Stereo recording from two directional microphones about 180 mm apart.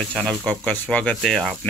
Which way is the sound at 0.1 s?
5° left (ahead or behind).